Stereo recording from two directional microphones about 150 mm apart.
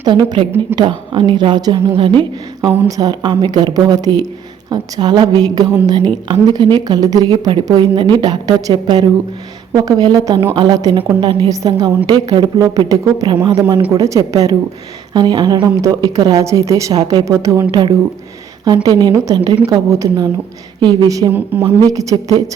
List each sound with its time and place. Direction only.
0.0 s a woman's voice: 30° right (ahead or behind)
2.6 s a woman's voice: 20° right (ahead or behind)
21.3 s speech: 10° right (ahead or behind)
21.8 s a woman's voice: 25° right (ahead or behind)